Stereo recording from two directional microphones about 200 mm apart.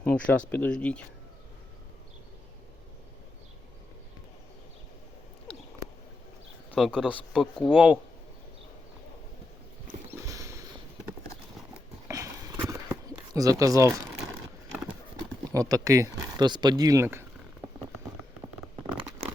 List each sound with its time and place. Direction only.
0.0 s speech: 5° left (ahead or behind)
6.7 s speech: centre (ahead or behind)
10.1 s horse: 15° right (ahead or behind)
12.0 s a sound: 15° right (ahead or behind)
15.5 s speech: 15° right (ahead or behind)